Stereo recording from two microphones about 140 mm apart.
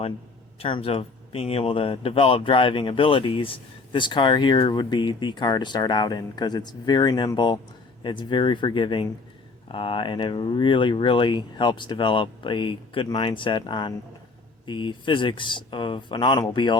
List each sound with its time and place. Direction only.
0.6 s speech: 40° left (ahead or behind)